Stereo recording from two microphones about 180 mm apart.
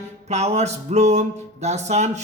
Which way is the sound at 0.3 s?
40° right (ahead or behind).